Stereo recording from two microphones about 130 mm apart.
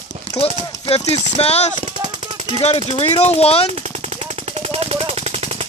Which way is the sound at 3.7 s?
55° right (ahead or behind).